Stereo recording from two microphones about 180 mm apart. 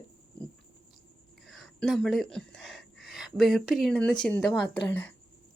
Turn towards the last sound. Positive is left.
turn(degrees=10)  # may be behind; listen again after turning